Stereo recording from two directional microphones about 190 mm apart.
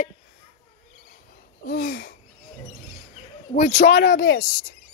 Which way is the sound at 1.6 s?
50° left (ahead or behind).